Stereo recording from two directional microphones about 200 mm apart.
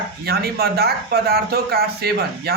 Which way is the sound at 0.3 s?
50° right (ahead or behind).